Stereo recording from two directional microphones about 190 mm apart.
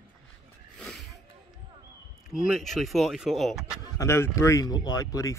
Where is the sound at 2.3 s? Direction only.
Centre (ahead or behind).